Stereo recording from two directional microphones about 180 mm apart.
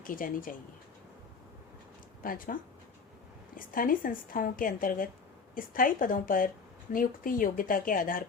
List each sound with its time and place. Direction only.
0.0 s a woman's voice: 50° left (ahead or behind)
2.2 s a woman's voice: 50° left (ahead or behind)